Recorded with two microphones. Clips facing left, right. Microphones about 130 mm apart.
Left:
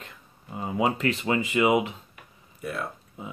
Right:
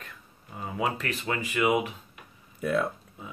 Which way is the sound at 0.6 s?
25° left (ahead or behind).